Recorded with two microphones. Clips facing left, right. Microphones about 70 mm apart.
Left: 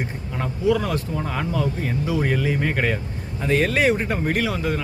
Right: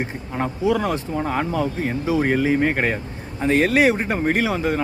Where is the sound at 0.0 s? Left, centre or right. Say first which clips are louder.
Right 3 dB; right.